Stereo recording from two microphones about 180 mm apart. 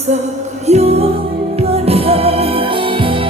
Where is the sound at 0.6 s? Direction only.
35° right (ahead or behind).